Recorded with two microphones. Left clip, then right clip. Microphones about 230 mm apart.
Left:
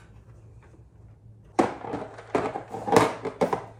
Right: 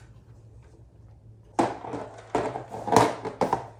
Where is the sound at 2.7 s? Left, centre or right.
Centre.